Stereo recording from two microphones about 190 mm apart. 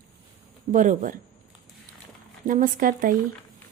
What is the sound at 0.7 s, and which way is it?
Speech, 45° right (ahead or behind).